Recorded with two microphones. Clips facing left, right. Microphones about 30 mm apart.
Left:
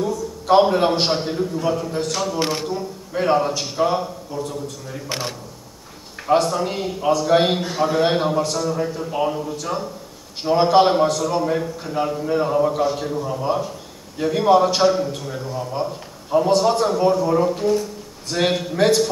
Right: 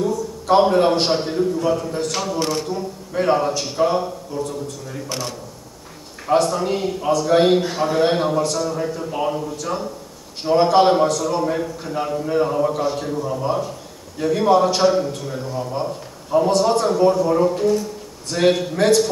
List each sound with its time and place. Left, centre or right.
0.0 s a man's voice: centre
2.3 s a man's voice: centre
2.6 s a man's voice: centre
6.2 s a man's voice: centre